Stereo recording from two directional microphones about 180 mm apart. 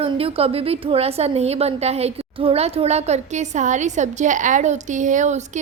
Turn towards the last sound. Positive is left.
turn(degrees=-40)  # may be behind; listen again after turning